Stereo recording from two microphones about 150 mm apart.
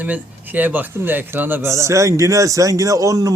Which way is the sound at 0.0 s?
10° right (ahead or behind).